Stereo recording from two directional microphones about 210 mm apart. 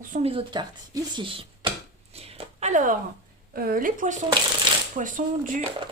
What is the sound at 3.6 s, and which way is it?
Speech, 45° right (ahead or behind).